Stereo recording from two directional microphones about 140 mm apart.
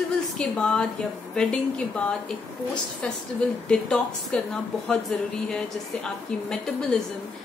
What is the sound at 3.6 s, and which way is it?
A woman's voice, 5° left (ahead or behind).